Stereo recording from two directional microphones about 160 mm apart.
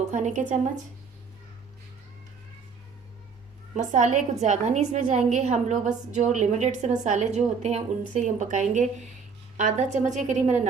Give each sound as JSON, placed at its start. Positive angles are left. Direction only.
{"t": 0.0, "sound": "a woman's voice", "side_deg": -50}
{"t": 3.8, "sound": "a woman's voice", "side_deg": -50}